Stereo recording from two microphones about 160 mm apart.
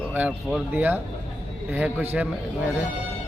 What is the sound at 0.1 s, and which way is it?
A man's voice, 10° right (ahead or behind).